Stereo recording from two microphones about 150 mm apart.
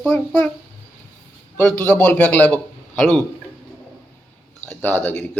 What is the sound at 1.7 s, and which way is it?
A man's voice, 10° left (ahead or behind).